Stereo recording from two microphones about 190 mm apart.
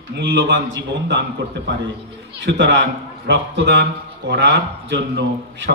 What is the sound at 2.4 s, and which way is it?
A man's voice, 70° right (ahead or behind).